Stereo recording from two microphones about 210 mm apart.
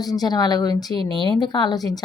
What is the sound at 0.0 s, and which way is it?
Speech, 20° left (ahead or behind).